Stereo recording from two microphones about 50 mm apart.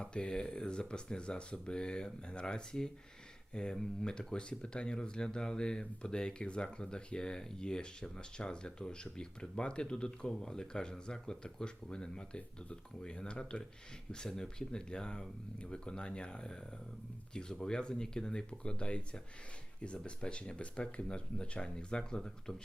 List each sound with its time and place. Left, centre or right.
0.0 s speech: centre